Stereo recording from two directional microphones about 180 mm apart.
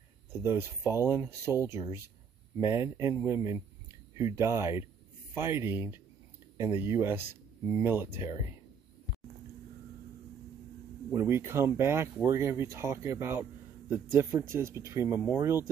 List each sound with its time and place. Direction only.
0.3 s speech: 15° right (ahead or behind)
11.1 s speech: 15° right (ahead or behind)